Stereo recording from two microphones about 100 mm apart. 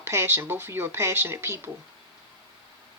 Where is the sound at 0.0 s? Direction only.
25° right (ahead or behind).